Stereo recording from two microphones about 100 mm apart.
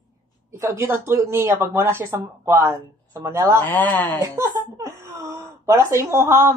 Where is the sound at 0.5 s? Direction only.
30° right (ahead or behind).